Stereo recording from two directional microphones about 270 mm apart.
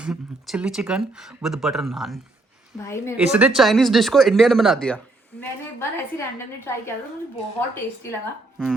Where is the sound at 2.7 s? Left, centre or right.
Centre.